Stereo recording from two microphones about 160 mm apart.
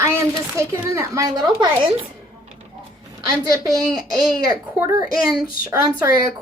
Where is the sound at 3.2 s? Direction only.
20° right (ahead or behind).